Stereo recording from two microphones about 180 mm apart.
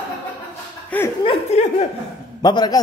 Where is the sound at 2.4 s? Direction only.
20° left (ahead or behind).